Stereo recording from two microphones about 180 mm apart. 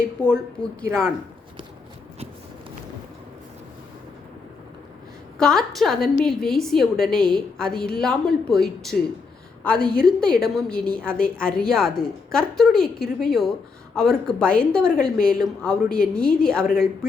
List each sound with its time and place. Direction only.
0.2 s speech: 15° right (ahead or behind)
5.4 s a woman's voice: 5° left (ahead or behind)